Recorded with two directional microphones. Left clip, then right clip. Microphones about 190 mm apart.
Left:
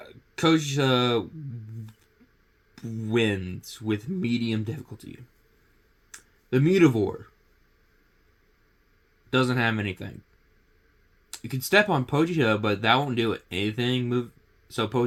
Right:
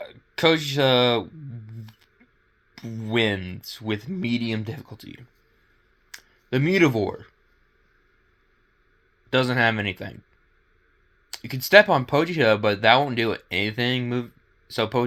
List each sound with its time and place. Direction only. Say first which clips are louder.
0.0 s speech: right 4 dB; 15° right (ahead or behind)
3.1 s speech: right 2 dB; 15° right (ahead or behind)
9.3 s speech: right 4 dB; 20° right (ahead or behind)
11.3 s speech: right 6 dB; 15° right (ahead or behind)